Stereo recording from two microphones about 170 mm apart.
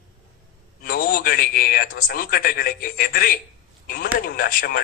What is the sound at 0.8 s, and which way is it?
A man's voice, 60° left (ahead or behind).